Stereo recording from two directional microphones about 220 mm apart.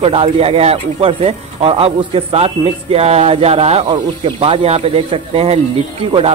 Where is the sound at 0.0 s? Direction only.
25° right (ahead or behind).